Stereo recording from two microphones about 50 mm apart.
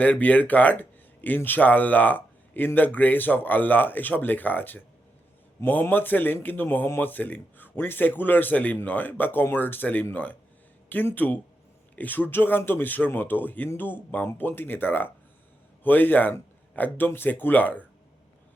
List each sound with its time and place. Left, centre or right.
0.0 s speech: left
5.9 s speech: left